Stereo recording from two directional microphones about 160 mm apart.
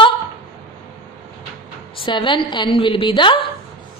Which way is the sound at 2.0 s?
30° left (ahead or behind).